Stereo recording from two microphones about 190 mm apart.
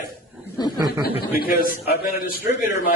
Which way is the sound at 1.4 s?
55° left (ahead or behind).